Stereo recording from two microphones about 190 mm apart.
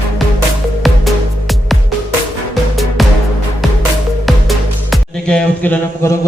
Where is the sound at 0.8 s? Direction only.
Centre (ahead or behind).